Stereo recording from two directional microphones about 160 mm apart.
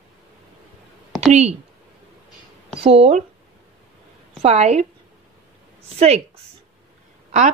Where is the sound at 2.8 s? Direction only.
40° right (ahead or behind).